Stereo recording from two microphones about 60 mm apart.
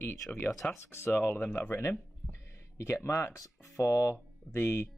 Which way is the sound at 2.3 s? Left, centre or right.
Left.